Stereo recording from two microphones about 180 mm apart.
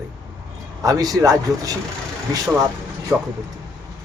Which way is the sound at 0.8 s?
20° right (ahead or behind).